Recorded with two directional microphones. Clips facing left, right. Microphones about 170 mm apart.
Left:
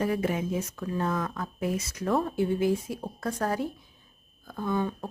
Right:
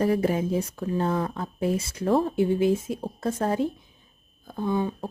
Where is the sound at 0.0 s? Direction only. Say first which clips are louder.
Right 4 dB; 35° right (ahead or behind).